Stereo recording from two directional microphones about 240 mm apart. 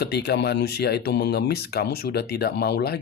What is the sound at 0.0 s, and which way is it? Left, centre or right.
Speech, left.